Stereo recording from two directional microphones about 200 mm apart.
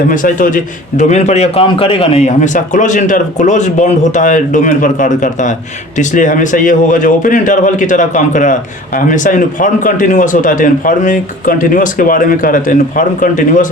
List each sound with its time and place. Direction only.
0.1 s a man's voice: 40° left (ahead or behind)